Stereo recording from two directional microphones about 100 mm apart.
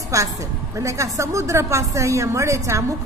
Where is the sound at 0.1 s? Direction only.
30° right (ahead or behind).